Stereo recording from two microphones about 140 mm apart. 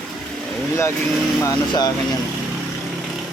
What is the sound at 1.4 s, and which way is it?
Speech, 25° left (ahead or behind).